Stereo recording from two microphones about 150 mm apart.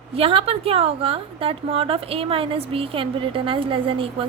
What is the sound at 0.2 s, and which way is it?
A woman's voice, 40° right (ahead or behind).